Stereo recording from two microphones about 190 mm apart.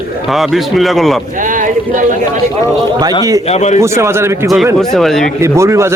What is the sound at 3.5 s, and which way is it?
Speech, 35° left (ahead or behind).